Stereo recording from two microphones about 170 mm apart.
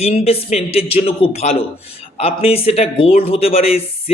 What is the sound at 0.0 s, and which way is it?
A man's voice, 35° left (ahead or behind).